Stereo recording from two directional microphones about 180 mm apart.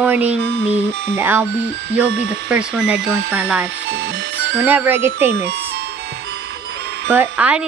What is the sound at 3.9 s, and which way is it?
Music, 85° right.